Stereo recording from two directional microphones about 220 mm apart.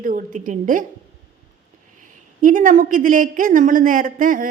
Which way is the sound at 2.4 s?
35° right (ahead or behind).